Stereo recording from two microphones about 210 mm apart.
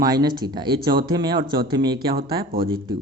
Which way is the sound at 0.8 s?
45° right (ahead or behind).